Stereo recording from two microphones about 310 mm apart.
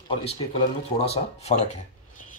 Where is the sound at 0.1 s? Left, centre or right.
Centre.